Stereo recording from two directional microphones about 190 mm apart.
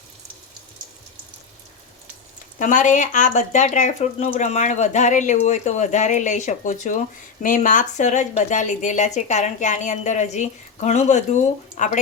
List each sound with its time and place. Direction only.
2.6 s speech: 40° left (ahead or behind)